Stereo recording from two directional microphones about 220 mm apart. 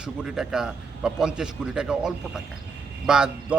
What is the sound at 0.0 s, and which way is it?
A man's voice, 5° right (ahead or behind).